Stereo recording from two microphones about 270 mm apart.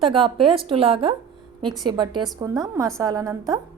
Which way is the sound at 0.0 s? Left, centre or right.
Centre.